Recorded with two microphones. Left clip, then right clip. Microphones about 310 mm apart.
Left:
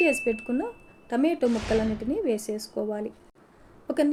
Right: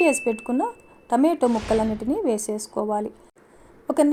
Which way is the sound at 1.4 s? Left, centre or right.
Centre.